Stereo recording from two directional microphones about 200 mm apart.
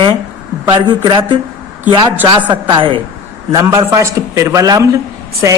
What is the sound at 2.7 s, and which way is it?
A man's voice, 25° right (ahead or behind).